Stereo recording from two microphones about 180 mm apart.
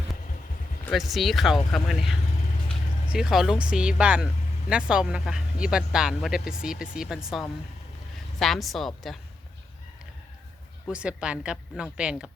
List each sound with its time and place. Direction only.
0.9 s speech: centre (ahead or behind)
10.8 s speech: 5° right (ahead or behind)